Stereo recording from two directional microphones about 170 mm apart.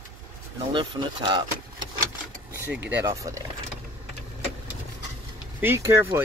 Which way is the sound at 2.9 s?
15° right (ahead or behind).